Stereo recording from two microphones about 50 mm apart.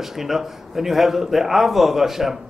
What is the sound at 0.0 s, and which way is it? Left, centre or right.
A man's voice, centre.